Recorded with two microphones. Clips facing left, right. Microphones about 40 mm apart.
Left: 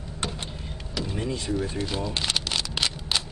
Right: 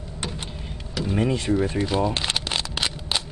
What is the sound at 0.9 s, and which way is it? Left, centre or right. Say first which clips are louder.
Power windows: right 5 dB; centre.